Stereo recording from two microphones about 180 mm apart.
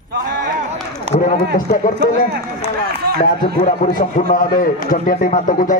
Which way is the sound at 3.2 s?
40° left (ahead or behind).